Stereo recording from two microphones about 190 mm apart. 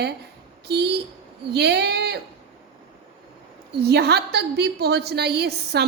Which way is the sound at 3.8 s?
60° right (ahead or behind).